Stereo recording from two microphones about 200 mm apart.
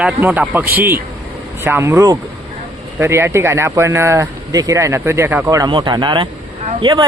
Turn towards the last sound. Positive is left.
turn(degrees=-25)  # may be behind; listen again after turning